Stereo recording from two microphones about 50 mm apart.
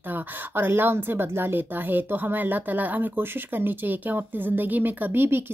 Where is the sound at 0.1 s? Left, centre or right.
Right.